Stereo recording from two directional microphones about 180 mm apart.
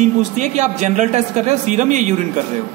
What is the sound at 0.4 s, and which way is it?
A man's voice, 40° right (ahead or behind).